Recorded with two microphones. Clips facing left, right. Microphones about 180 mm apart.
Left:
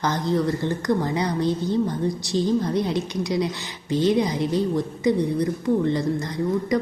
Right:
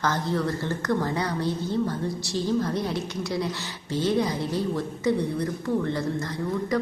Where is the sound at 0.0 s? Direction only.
15° left (ahead or behind).